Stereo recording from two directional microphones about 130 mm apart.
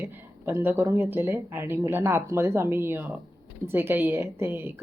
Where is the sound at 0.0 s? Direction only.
15° right (ahead or behind).